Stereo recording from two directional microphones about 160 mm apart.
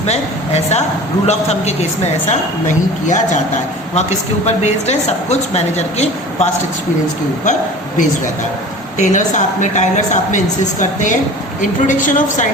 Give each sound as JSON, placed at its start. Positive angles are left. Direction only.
{"t": 0.0, "sound": "a woman's voice", "side_deg": 45}
{"t": 9.0, "sound": "a woman's voice", "side_deg": 50}